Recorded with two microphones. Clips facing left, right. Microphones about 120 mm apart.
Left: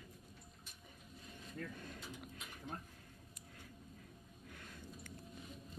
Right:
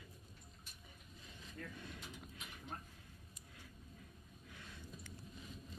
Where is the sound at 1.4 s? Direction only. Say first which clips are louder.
Left 3 dB; 45° left (ahead or behind).